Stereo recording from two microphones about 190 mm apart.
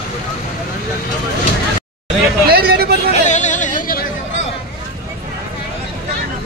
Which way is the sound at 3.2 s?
40° left (ahead or behind).